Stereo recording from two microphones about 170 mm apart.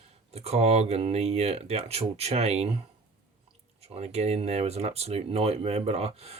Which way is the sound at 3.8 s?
40° right (ahead or behind).